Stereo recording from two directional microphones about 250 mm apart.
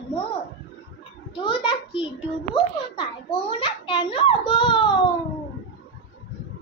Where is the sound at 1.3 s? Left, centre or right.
Left.